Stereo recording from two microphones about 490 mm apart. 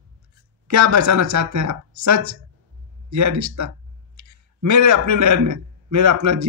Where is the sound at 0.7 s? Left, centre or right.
Right.